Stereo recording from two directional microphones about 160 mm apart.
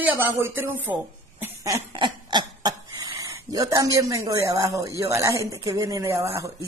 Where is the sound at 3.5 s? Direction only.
20° right (ahead or behind).